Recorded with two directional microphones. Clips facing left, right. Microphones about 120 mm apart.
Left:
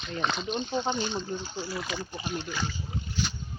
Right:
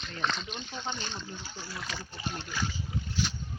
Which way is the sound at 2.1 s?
15° left (ahead or behind).